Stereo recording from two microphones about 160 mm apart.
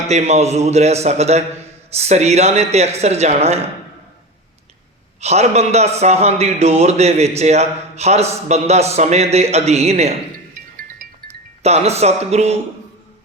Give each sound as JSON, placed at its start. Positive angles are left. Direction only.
{"t": 0.1, "sound": "speech", "side_deg": -45}
{"t": 5.2, "sound": "a man's voice", "side_deg": -40}
{"t": 10.8, "sound": "music", "side_deg": -60}
{"t": 11.6, "sound": "a man's voice", "side_deg": -40}